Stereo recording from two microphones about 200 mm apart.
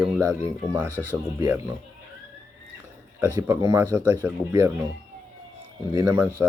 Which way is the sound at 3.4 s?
15° right (ahead or behind).